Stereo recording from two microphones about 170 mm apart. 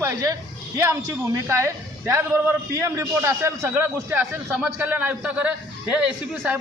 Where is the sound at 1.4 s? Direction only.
15° right (ahead or behind).